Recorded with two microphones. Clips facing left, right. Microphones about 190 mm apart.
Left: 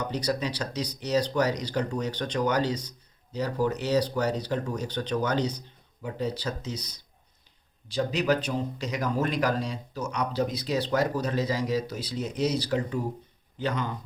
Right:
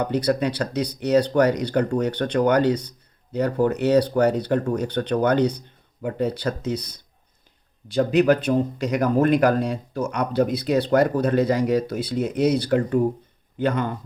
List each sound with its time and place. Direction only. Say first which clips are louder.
0.0 s speech: right 7 dB; 60° right (ahead or behind)